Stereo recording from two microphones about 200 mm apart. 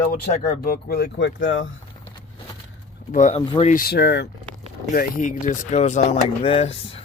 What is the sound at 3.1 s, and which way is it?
Speech, 35° left (ahead or behind).